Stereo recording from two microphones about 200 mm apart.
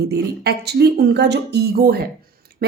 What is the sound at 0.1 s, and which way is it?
Speech, 55° right (ahead or behind).